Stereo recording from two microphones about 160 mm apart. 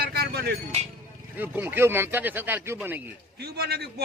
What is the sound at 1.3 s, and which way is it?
Speech, 10° right (ahead or behind).